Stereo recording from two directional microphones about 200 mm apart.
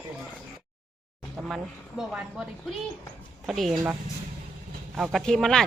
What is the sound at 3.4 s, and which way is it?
Speech, centre (ahead or behind).